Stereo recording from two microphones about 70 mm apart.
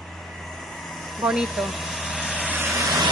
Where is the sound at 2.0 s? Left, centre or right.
Centre.